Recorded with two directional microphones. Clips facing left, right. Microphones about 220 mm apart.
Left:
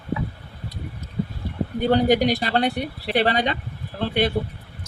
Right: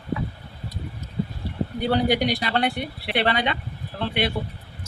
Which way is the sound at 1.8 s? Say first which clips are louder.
Left 4 dB; 45° left (ahead or behind).